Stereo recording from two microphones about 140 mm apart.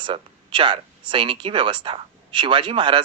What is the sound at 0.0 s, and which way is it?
Speech, 35° right (ahead or behind).